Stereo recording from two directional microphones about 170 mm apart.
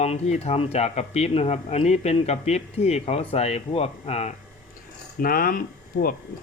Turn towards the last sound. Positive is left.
turn(degrees=60)  # may be behind; listen again after turning